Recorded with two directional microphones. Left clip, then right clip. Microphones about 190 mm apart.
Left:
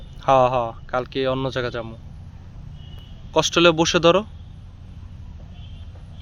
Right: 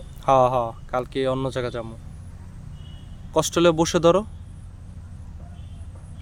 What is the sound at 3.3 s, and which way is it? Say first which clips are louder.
Speech: left 3 dB; 15° right (ahead or behind).